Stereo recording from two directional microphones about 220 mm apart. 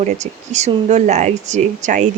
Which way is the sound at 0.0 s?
30° right (ahead or behind).